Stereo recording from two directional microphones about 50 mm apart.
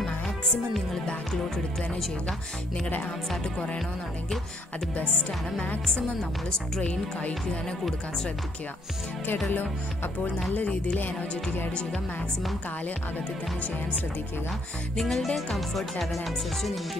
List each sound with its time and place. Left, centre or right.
1.0 s music: centre
6.8 s speech: left
10.5 s speech: left
15.0 s speech: centre